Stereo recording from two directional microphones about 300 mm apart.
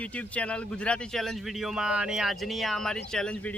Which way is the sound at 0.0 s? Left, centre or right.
Centre.